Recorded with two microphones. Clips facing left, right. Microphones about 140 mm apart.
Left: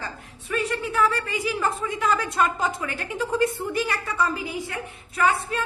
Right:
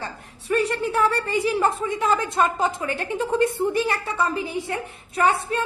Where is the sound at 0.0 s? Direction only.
35° right (ahead or behind).